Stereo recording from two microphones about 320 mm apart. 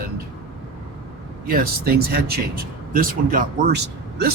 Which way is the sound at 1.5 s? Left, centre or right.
Right.